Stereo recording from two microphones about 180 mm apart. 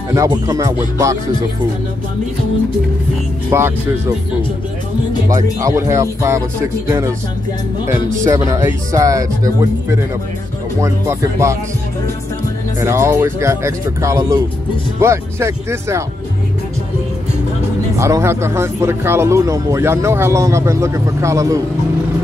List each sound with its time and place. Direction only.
0.1 s speech: 20° right (ahead or behind)
3.4 s speech: 15° right (ahead or behind)
5.3 s speech: 15° right (ahead or behind)
8.2 s speech: 15° right (ahead or behind)
12.8 s speech: 15° right (ahead or behind)
17.9 s speech: 15° right (ahead or behind)